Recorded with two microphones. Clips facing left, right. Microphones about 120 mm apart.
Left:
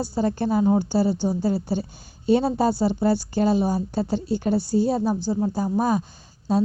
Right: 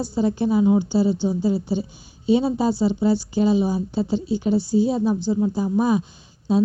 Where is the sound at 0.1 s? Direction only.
45° left (ahead or behind).